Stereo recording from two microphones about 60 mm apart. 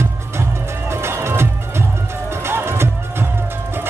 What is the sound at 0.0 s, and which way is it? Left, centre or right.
Music, right.